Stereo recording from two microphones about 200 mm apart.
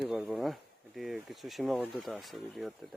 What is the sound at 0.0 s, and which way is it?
Speech, centre (ahead or behind).